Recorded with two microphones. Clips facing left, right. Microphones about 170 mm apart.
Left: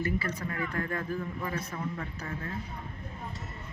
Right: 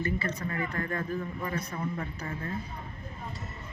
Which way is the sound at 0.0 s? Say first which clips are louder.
Even; 10° left (ahead or behind).